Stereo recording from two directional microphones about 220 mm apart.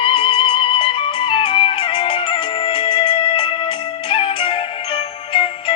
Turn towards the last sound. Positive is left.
turn(degrees=25)  # may be behind; listen again after turning